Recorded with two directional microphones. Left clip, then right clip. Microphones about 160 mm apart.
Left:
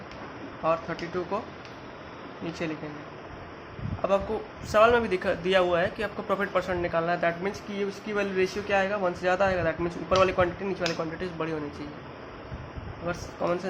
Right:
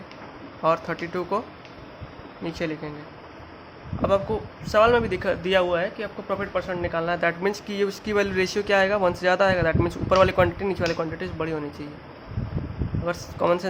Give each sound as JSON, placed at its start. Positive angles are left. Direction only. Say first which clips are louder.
{"t": 0.6, "sound": "speech", "louder": "right 4 dB", "side_deg": -35}
{"t": 2.4, "sound": "a man's voice", "louder": "right 4 dB", "side_deg": -30}
{"t": 4.6, "sound": "a man's voice", "louder": "right 2 dB", "side_deg": -20}
{"t": 7.4, "sound": "speech", "louder": "right 6 dB", "side_deg": -40}
{"t": 13.1, "sound": "speech", "louder": "right 6 dB", "side_deg": -35}